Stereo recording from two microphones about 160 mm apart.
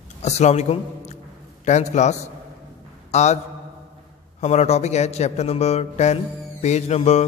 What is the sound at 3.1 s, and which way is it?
A man's voice, 45° left (ahead or behind).